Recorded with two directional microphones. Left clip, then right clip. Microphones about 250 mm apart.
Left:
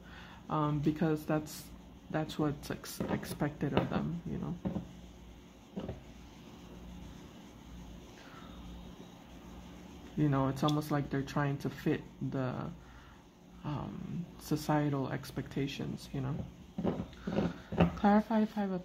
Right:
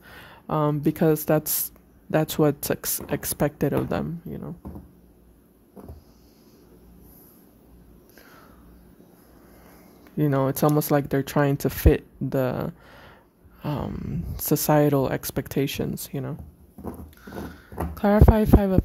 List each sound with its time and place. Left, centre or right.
0.1 s speech: right
10.1 s speech: right
17.9 s speech: right